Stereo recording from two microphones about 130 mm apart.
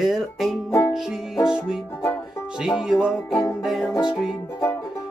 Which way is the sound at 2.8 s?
5° right (ahead or behind).